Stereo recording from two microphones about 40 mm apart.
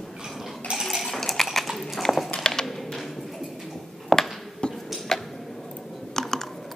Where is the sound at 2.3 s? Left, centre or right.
Centre.